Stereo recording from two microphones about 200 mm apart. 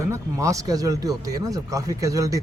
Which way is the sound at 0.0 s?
15° right (ahead or behind).